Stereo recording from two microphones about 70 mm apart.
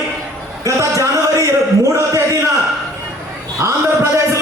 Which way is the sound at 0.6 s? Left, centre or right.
Right.